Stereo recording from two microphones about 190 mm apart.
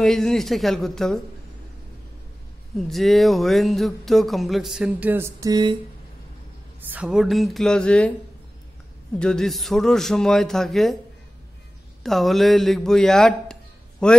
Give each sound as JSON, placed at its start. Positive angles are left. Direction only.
{"t": 0.0, "sound": "speech", "side_deg": 0}
{"t": 2.8, "sound": "speech", "side_deg": 0}
{"t": 6.9, "sound": "speech", "side_deg": -5}
{"t": 9.2, "sound": "speech", "side_deg": 5}
{"t": 12.0, "sound": "a man's voice", "side_deg": 0}